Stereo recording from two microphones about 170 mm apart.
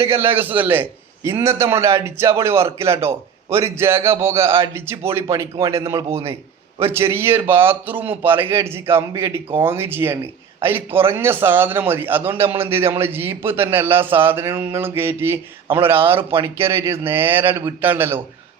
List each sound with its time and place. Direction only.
0.0 s a man's voice: 15° right (ahead or behind)